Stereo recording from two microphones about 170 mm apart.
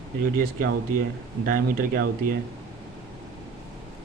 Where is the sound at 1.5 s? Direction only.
55° right (ahead or behind).